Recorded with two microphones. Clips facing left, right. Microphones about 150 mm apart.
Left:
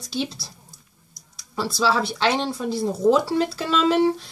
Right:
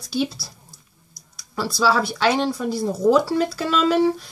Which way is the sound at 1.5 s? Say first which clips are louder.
Right 2 dB; 25° left (ahead or behind).